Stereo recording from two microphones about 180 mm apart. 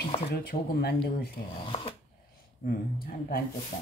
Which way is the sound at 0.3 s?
60° left (ahead or behind).